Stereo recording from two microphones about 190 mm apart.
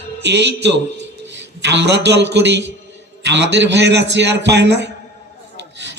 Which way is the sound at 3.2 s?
65° right (ahead or behind).